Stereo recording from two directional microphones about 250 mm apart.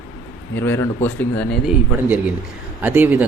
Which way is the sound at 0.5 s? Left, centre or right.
Centre.